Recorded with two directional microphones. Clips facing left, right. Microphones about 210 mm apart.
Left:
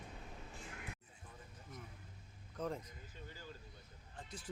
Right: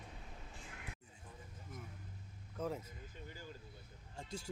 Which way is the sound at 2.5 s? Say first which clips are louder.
Right 1 dB; 5° right (ahead or behind).